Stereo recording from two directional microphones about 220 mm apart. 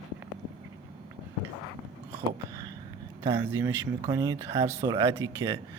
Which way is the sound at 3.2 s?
20° right (ahead or behind).